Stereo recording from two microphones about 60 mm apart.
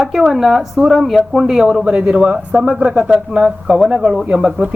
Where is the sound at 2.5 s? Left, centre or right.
Centre.